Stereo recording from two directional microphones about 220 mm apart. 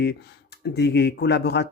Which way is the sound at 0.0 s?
50° left (ahead or behind).